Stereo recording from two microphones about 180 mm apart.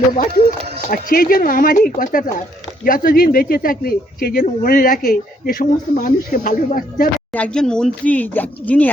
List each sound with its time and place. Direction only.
0.9 s speech: 55° left (ahead or behind)
7.3 s speech: 5° left (ahead or behind)